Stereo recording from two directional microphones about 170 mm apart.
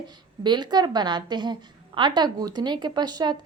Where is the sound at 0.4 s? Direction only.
25° right (ahead or behind).